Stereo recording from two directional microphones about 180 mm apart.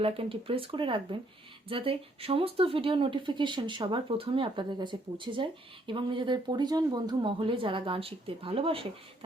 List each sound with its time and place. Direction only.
0.0 s speech: 30° right (ahead or behind)